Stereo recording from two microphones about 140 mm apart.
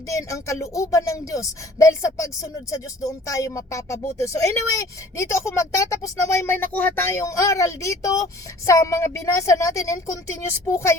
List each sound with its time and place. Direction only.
0.1 s speech: 20° left (ahead or behind)